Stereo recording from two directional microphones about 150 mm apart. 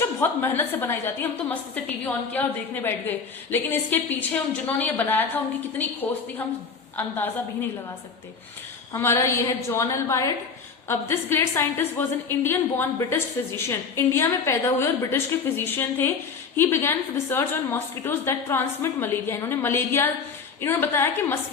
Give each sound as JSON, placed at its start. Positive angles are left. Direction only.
{"t": 0.2, "sound": "a woman's voice", "side_deg": 15}
{"t": 8.9, "sound": "a woman's voice", "side_deg": 20}